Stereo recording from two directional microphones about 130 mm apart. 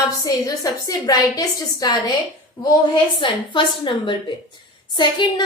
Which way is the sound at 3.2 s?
40° left (ahead or behind).